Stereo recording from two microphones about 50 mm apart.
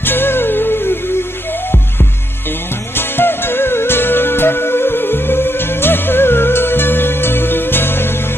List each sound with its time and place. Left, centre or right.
0.0 s music: left
3.0 s music: left